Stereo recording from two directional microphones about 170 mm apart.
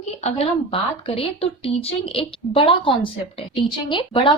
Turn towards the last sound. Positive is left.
turn(degrees=30)  # may be behind; listen again after turning